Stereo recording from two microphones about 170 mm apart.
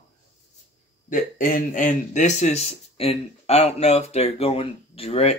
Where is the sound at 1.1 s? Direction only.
50° left (ahead or behind).